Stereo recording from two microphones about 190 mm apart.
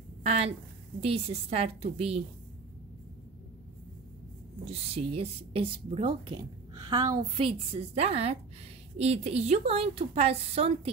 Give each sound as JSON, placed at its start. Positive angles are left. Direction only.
{"t": 0.3, "sound": "a woman's voice", "side_deg": -35}
{"t": 4.6, "sound": "a woman's voice", "side_deg": -30}
{"t": 7.3, "sound": "a woman's voice", "side_deg": -30}